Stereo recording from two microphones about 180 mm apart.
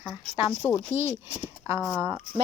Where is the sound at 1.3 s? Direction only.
15° right (ahead or behind).